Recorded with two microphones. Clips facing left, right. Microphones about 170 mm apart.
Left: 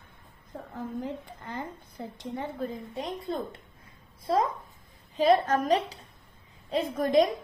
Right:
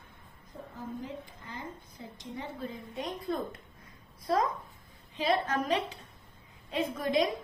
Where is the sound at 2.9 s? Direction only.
30° left (ahead or behind).